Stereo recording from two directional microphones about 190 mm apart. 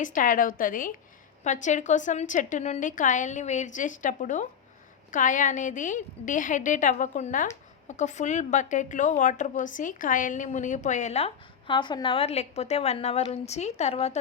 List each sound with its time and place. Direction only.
0.0 s a woman's voice: 45° left (ahead or behind)